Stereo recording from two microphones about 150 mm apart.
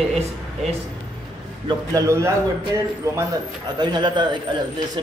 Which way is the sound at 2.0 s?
20° right (ahead or behind).